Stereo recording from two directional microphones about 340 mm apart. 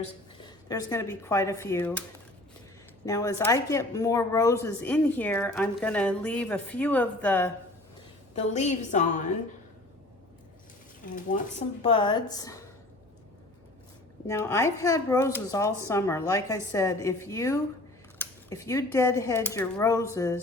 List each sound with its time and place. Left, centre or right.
0.4 s speech: centre
3.1 s a woman's voice: centre
8.4 s a woman's voice: centre
11.0 s a woman's voice: left
14.3 s speech: centre